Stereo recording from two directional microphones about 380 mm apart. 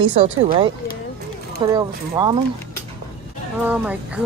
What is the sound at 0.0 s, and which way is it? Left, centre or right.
Speech, centre.